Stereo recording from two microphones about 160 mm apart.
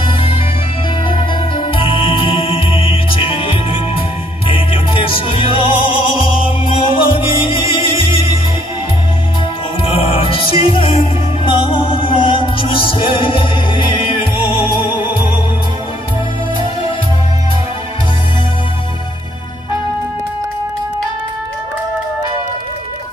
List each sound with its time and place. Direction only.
0.0 s music: 35° left (ahead or behind)
9.8 s music: 35° left (ahead or behind)